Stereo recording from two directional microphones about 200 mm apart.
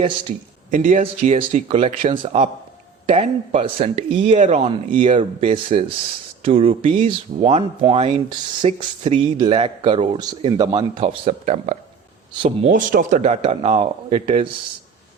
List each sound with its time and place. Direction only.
0.7 s speech: 40° right (ahead or behind)
1.4 s speech: 30° right (ahead or behind)
4.7 s speech: 25° right (ahead or behind)